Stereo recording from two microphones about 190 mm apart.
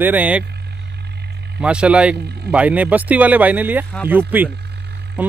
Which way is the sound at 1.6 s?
5° right (ahead or behind).